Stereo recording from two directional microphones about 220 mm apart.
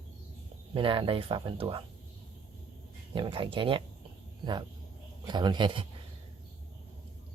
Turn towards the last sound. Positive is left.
turn(degrees=-20)  # may be behind; listen again after turning